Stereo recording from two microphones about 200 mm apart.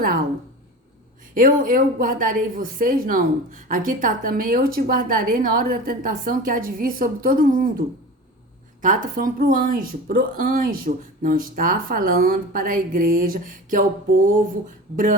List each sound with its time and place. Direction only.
0.0 s a woman's voice: 45° right (ahead or behind)
1.3 s a woman's voice: 40° right (ahead or behind)
8.8 s a woman's voice: 40° right (ahead or behind)